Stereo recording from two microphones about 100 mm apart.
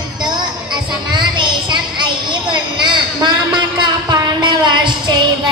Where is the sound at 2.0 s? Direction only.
50° right (ahead or behind).